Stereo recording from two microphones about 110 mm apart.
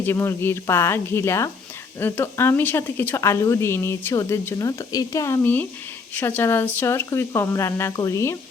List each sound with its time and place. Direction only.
0.0 s speech: 20° left (ahead or behind)